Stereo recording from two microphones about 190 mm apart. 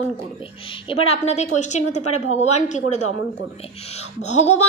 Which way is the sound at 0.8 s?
30° left (ahead or behind).